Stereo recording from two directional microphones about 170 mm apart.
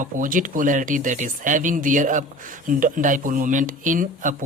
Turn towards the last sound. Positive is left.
turn(degrees=-50)  # may be behind; listen again after turning